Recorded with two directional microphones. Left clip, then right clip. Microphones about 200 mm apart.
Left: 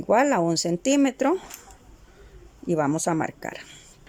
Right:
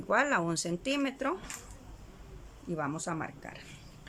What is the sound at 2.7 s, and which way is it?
Speech, 40° left (ahead or behind).